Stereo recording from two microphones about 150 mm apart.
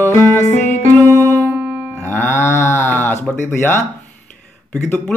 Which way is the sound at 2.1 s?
15° left (ahead or behind).